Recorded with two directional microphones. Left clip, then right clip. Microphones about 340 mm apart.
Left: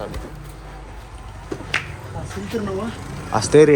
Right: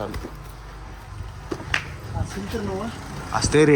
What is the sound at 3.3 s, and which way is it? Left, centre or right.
Speech, centre.